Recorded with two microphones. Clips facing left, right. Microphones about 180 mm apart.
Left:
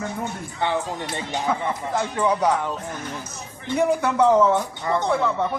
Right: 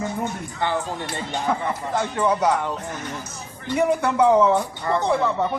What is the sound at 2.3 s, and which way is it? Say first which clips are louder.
Speech: even; 5° right (ahead or behind).